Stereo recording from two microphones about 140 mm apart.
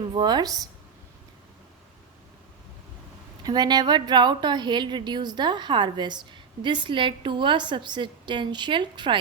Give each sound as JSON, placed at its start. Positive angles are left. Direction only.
{"t": 0.1, "sound": "a woman's voice", "side_deg": -30}
{"t": 3.4, "sound": "a woman's voice", "side_deg": -30}